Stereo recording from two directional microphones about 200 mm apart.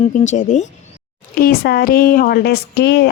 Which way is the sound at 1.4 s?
50° left (ahead or behind).